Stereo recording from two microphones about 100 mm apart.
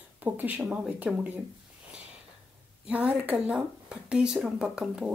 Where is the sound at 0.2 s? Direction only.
15° right (ahead or behind).